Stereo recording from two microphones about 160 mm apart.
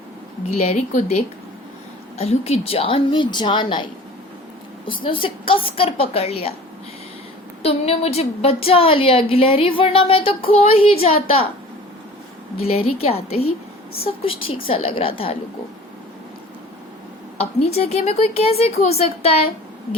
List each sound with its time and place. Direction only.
0.5 s speech: 40° left (ahead or behind)
5.0 s speech: 35° left (ahead or behind)
7.6 s speech: 40° left (ahead or behind)
12.7 s speech: 40° left (ahead or behind)
17.7 s speech: 40° left (ahead or behind)